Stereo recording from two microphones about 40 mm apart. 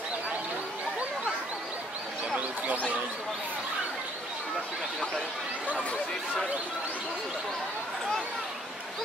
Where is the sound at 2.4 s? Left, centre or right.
Right.